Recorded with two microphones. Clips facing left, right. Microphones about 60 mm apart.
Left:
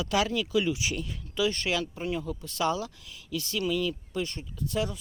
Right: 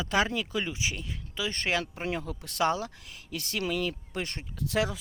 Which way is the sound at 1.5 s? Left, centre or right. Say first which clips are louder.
Left 1 dB; right.